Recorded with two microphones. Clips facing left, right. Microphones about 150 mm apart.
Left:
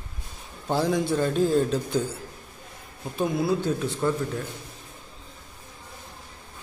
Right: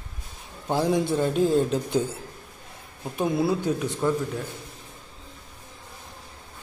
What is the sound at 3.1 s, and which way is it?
A man's voice, 15° right (ahead or behind).